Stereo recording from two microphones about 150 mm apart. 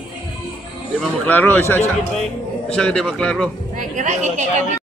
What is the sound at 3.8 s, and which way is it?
Speech, 55° right (ahead or behind).